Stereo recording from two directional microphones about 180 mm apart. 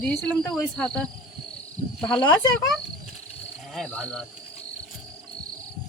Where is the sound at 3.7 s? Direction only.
5° left (ahead or behind).